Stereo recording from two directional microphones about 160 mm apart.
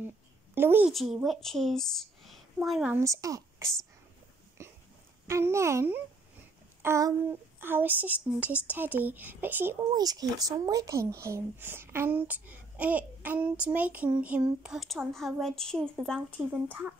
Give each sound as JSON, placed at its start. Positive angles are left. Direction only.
{"t": 0.6, "sound": "speech", "side_deg": -15}
{"t": 0.9, "sound": "a woman's voice", "side_deg": 0}
{"t": 2.9, "sound": "a woman's voice", "side_deg": -20}
{"t": 4.6, "sound": "hiccup", "side_deg": -15}
{"t": 5.2, "sound": "speech", "side_deg": -15}
{"t": 9.9, "sound": "speech", "side_deg": -25}